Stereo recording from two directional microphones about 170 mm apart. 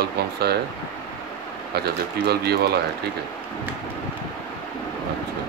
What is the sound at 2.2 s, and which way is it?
Speech, 75° right (ahead or behind).